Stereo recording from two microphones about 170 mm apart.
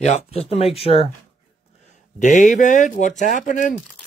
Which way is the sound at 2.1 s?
45° left (ahead or behind).